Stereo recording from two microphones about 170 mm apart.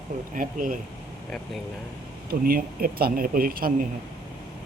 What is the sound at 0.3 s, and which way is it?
Speech, 55° right (ahead or behind).